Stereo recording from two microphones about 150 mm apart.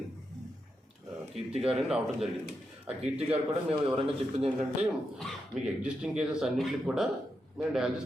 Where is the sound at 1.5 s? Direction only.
40° right (ahead or behind).